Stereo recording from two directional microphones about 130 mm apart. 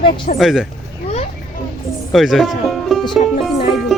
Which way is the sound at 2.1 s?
Centre (ahead or behind).